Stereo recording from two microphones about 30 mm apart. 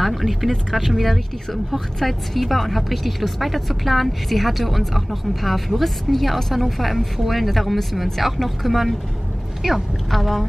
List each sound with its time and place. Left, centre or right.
0.0 s a sound: centre
0.7 s speech: centre
2.3 s speech: centre